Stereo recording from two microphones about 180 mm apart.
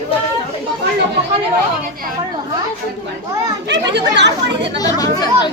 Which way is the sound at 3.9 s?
75° right (ahead or behind).